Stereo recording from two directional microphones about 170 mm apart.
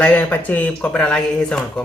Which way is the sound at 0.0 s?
10° left (ahead or behind).